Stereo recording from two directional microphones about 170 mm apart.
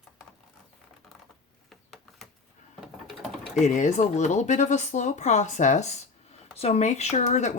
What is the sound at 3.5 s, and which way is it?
Speech, 45° left (ahead or behind).